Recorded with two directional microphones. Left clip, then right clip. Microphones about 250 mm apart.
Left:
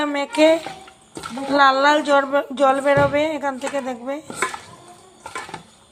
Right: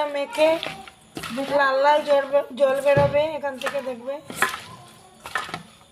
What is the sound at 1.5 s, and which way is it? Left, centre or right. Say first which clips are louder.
Speech: left 4 dB; centre.